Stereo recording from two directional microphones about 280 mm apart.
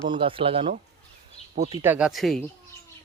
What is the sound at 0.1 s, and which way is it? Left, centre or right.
Speech, centre.